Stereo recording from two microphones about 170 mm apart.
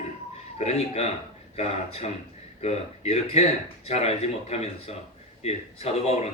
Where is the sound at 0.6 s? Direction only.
40° left (ahead or behind).